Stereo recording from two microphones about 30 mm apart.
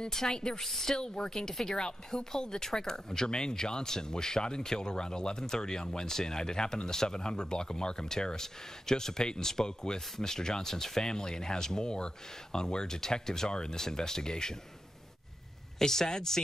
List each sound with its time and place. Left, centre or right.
0.1 s speech: left
0.6 s a woman's voice: centre
0.9 s speech: left
9.2 s speech: left
15.8 s speech: centre